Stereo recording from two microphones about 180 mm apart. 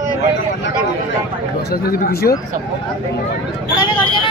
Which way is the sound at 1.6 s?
60° left (ahead or behind).